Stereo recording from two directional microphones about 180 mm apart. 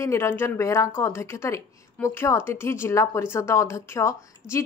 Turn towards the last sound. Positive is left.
turn(degrees=15)  # may be behind; listen again after turning